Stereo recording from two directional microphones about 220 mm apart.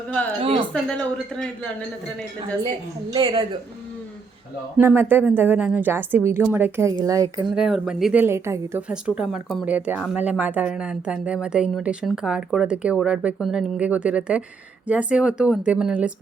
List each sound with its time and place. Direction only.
0.7 s a woman's voice: 5° left (ahead or behind)
3.1 s a woman's voice: 20° right (ahead or behind)
4.8 s a woman's voice: 10° right (ahead or behind)
7.5 s a woman's voice: 5° right (ahead or behind)